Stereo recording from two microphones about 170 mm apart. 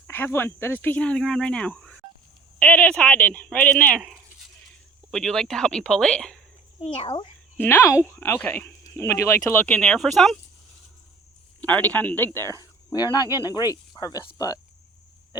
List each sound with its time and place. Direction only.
0.1 s speech: 15° left (ahead or behind)
6.8 s a child's voice: 35° left (ahead or behind)
7.5 s speech: 10° left (ahead or behind)
11.6 s speech: 10° left (ahead or behind)